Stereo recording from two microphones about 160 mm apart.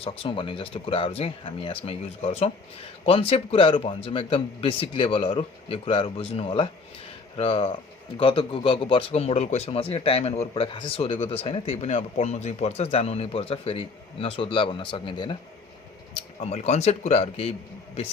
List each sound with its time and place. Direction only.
0.0 s speech: 35° left (ahead or behind)
10.5 s speech: 30° left (ahead or behind)
16.1 s speech: 40° left (ahead or behind)